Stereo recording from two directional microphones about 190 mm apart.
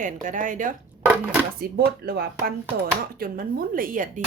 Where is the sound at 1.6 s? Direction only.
50° right (ahead or behind).